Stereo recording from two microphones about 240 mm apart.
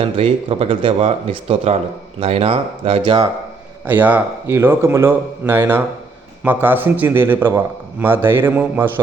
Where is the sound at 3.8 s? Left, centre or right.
Centre.